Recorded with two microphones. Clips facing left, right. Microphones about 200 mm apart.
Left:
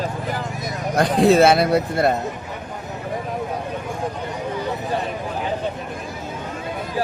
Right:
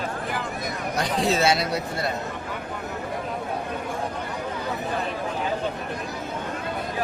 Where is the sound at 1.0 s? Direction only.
55° left (ahead or behind).